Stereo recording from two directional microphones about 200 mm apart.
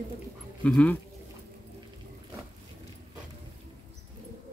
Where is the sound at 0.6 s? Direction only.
5° left (ahead or behind).